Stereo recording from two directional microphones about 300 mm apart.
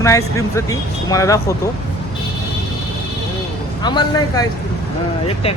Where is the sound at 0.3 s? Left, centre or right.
Centre.